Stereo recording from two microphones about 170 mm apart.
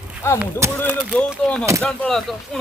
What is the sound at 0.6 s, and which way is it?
Speech, 15° right (ahead or behind).